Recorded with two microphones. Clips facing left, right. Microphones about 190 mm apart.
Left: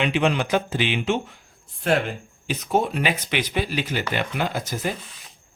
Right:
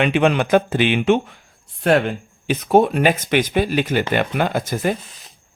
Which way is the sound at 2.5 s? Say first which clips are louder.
Right 8 dB; 60° right (ahead or behind).